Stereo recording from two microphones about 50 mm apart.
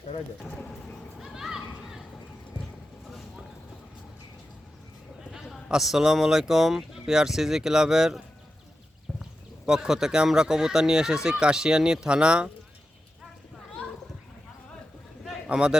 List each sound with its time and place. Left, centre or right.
0.4 s speech: centre
1.2 s a sound: centre
5.2 s a sound: centre
5.6 s speech: centre
9.6 s speech: centre
15.4 s speech: centre